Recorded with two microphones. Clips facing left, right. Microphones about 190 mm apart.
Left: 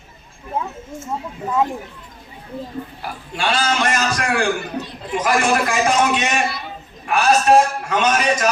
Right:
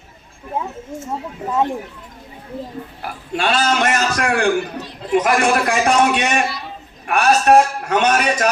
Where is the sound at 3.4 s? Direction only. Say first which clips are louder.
Right 2 dB; 60° right (ahead or behind).